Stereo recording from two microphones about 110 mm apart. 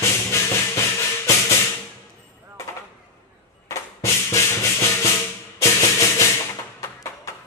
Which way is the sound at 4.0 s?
25° left (ahead or behind).